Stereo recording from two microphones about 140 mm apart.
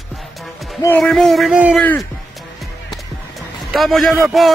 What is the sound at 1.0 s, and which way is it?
Speech, 5° left (ahead or behind).